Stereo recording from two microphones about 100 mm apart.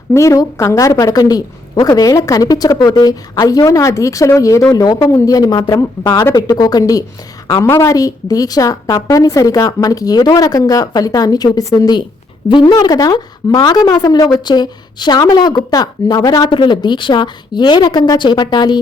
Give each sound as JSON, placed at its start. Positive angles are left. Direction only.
{"t": 0.1, "sound": "a woman's voice", "side_deg": 30}
{"t": 12.5, "sound": "speech", "side_deg": 55}
{"t": 12.7, "sound": "speech", "side_deg": 40}